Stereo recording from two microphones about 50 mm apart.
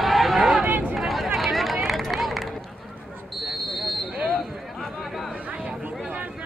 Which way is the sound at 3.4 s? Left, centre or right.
Centre.